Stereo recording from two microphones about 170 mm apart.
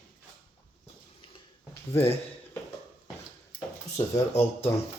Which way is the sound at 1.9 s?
15° left (ahead or behind).